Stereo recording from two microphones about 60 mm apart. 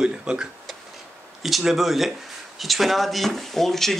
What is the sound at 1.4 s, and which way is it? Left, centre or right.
Speech, centre.